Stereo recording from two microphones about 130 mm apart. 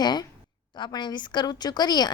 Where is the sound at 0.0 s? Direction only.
35° left (ahead or behind).